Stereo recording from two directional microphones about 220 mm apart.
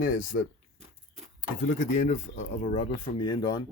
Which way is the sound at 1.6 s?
35° left (ahead or behind).